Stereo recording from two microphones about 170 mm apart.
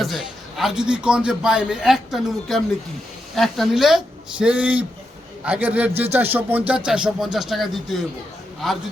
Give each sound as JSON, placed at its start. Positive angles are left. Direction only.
{"t": 0.0, "sound": "a man's voice", "side_deg": 0}